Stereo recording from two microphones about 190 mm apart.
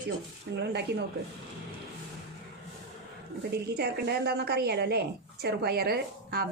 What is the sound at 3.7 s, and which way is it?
A woman's voice, 60° right (ahead or behind).